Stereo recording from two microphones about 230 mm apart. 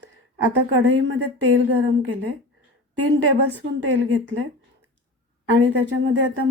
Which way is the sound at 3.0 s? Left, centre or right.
Right.